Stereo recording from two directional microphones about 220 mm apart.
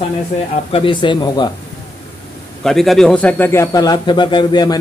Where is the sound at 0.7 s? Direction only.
25° left (ahead or behind).